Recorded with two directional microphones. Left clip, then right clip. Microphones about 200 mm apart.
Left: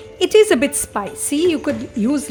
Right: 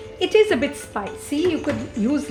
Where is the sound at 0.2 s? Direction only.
55° left (ahead or behind).